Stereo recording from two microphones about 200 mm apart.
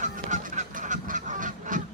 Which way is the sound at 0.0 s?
35° right (ahead or behind).